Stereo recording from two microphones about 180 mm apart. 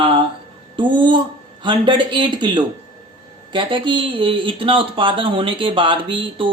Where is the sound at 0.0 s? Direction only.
25° right (ahead or behind).